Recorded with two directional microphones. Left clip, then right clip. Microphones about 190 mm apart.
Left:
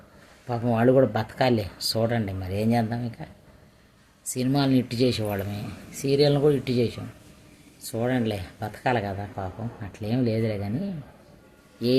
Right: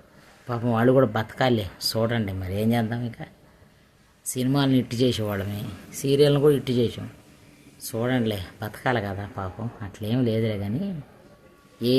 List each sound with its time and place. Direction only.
0.4 s speech: 20° right (ahead or behind)
4.3 s speech: 20° right (ahead or behind)